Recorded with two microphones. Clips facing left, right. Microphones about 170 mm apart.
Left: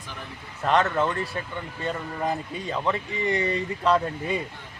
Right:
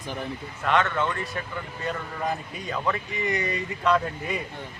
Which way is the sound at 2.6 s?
25° left (ahead or behind).